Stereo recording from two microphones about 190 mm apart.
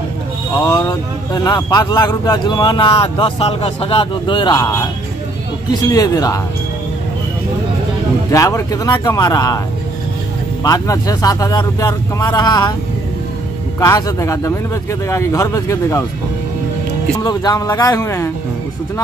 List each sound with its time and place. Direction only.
0.6 s speech: 20° left (ahead or behind)
8.3 s speech: 15° left (ahead or behind)
10.6 s speech: 20° left (ahead or behind)
13.7 s a man's voice: 20° left (ahead or behind)
17.2 s a man's voice: 20° left (ahead or behind)